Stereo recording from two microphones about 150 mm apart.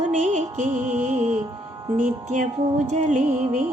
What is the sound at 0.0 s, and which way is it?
Music, 50° right (ahead or behind).